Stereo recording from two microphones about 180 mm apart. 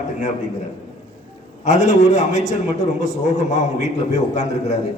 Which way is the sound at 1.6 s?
40° left (ahead or behind).